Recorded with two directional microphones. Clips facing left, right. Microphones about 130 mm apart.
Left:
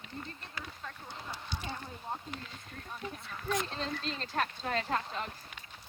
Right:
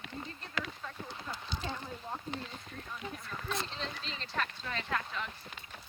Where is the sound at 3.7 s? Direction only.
45° left (ahead or behind).